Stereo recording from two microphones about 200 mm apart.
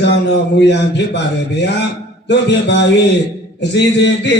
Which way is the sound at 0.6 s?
60° left (ahead or behind).